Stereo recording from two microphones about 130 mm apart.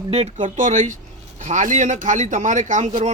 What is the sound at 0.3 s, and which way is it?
A man's voice, 75° right (ahead or behind).